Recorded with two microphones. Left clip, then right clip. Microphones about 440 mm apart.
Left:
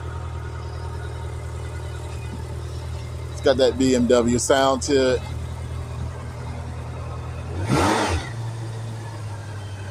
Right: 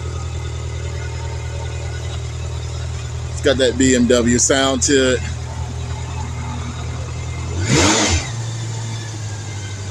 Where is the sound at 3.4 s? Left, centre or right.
Left.